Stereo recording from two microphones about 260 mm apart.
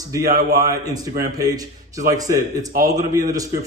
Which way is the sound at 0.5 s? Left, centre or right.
Centre.